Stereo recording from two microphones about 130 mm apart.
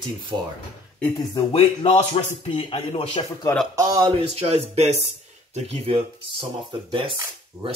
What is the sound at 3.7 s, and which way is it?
Speech, 30° right (ahead or behind).